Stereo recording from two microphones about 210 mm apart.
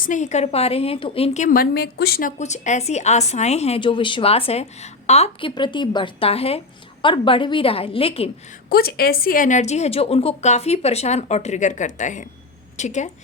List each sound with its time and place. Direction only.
0.0 s a woman's voice: 35° left (ahead or behind)
2.4 s a woman's voice: 35° left (ahead or behind)
8.7 s a woman's voice: 45° left (ahead or behind)